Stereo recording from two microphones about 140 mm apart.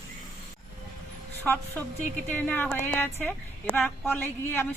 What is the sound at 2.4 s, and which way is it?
Speech, 15° left (ahead or behind).